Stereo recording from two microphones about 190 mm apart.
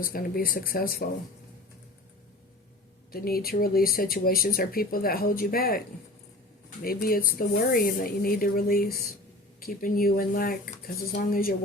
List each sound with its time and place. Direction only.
0.0 s speech: 50° left (ahead or behind)
3.1 s speech: 50° left (ahead or behind)
6.8 s speech: 50° left (ahead or behind)